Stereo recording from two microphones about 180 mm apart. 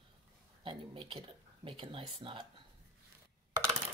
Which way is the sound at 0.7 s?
30° right (ahead or behind).